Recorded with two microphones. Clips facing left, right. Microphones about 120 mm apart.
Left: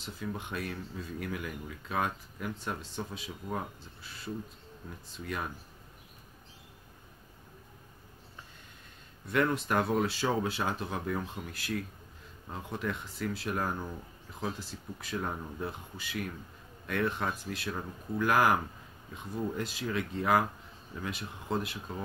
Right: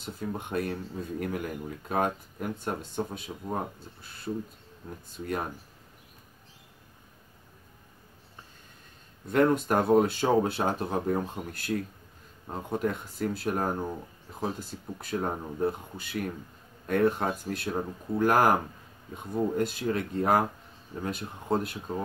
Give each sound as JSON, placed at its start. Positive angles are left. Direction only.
{"t": 0.0, "sound": "speech", "side_deg": -45}
{"t": 9.3, "sound": "speech", "side_deg": -45}